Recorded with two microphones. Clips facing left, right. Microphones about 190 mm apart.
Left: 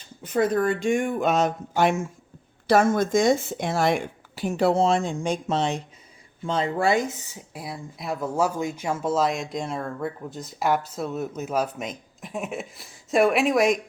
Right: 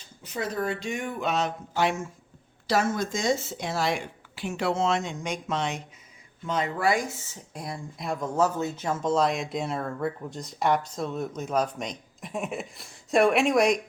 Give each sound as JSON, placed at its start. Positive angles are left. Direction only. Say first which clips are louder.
{"t": 0.2, "sound": "speech", "louder": "left 8 dB", "side_deg": 55}